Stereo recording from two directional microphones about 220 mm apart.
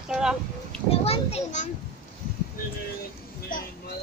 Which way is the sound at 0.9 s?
30° left (ahead or behind).